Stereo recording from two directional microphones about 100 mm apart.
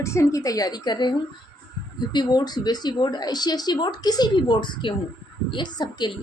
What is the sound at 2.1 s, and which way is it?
A woman's voice, 45° left (ahead or behind).